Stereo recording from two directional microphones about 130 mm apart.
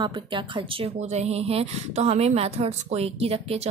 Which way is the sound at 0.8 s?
55° right (ahead or behind).